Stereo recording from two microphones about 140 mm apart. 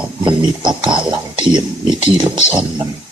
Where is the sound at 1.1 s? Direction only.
35° right (ahead or behind).